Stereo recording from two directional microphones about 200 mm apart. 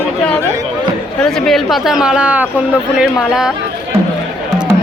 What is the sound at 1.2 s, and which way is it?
Speech, centre (ahead or behind).